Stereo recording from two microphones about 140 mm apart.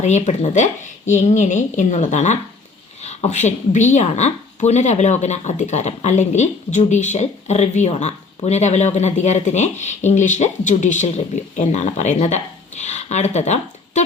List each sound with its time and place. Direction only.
0.0 s a woman's voice: 55° left (ahead or behind)